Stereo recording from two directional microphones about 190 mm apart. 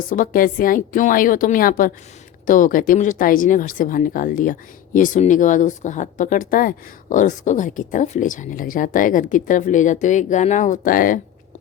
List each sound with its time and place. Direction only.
0.1 s speech: 45° left (ahead or behind)